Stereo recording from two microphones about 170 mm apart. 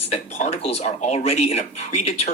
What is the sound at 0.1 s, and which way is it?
Speech, 40° left (ahead or behind).